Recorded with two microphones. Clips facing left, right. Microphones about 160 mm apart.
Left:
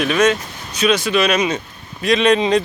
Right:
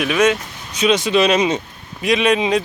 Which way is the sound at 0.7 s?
20° right (ahead or behind).